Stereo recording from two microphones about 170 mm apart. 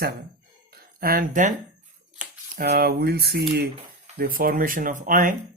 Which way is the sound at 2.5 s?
60° right (ahead or behind).